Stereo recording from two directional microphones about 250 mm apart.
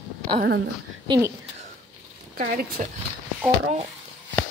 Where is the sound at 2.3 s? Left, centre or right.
Right.